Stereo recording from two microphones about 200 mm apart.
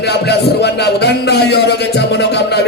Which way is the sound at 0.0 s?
55° left (ahead or behind).